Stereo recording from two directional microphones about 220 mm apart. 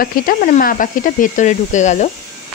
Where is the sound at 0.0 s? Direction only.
40° left (ahead or behind).